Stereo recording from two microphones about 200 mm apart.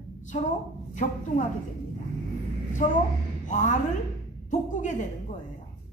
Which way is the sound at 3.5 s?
40° left (ahead or behind).